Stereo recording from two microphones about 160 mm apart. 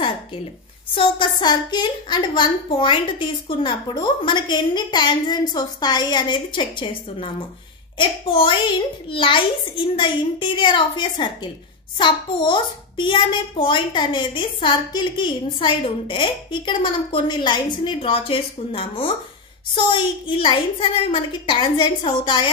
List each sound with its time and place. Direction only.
0.9 s a woman's voice: 30° left (ahead or behind)